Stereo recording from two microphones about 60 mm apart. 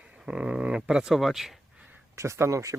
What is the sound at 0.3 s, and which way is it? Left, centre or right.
Speech, centre.